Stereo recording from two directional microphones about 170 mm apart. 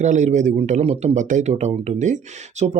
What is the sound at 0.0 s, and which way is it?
Speech, 45° right (ahead or behind).